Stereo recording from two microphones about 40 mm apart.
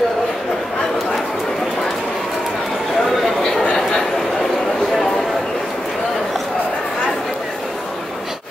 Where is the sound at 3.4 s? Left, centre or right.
Left.